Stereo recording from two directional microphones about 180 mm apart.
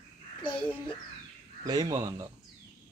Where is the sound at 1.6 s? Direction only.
20° right (ahead or behind).